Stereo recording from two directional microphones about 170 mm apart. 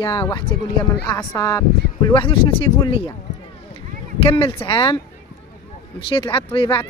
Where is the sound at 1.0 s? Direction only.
15° left (ahead or behind); by 3.1 s 35° left (ahead or behind).